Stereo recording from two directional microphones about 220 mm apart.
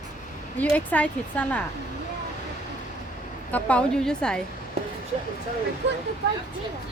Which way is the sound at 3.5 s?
5° left (ahead or behind).